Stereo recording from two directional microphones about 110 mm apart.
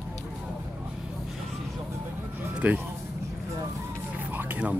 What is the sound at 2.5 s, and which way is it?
Speech, 15° right (ahead or behind).